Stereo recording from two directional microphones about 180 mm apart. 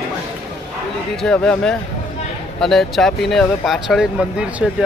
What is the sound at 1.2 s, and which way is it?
Speech, 5° left (ahead or behind).